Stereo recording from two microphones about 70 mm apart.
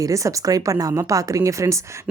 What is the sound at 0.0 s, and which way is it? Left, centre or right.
Speech, right.